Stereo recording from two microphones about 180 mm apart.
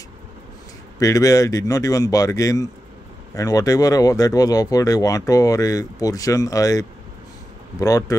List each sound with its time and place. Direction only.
0.9 s speech: 20° left (ahead or behind)